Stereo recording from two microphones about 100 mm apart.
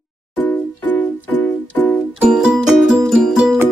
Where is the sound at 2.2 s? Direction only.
5° right (ahead or behind).